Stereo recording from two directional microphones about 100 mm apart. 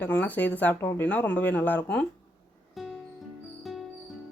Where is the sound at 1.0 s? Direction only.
15° left (ahead or behind).